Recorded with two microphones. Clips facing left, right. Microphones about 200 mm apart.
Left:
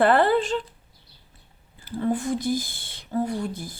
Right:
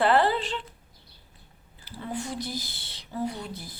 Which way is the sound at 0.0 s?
50° left (ahead or behind).